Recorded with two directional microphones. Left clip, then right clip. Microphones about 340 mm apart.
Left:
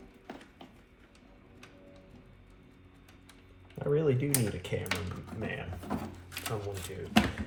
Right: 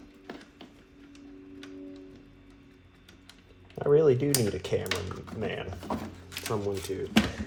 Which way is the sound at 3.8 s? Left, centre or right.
Right.